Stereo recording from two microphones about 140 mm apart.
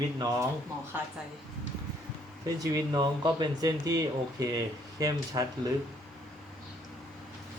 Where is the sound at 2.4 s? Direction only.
25° right (ahead or behind).